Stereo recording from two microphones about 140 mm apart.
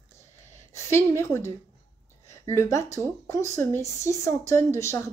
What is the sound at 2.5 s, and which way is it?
Speech, 20° left (ahead or behind).